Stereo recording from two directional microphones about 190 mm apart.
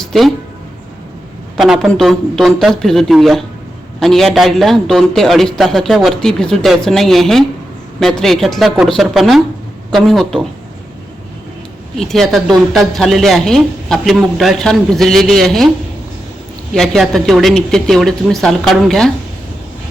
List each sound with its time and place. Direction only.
0.0 s music: centre (ahead or behind)
1.5 s speech: centre (ahead or behind)
11.9 s speech: centre (ahead or behind)
16.7 s speech: centre (ahead or behind)